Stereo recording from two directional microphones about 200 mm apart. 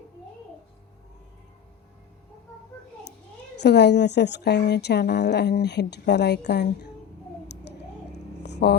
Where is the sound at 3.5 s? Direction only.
60° left (ahead or behind).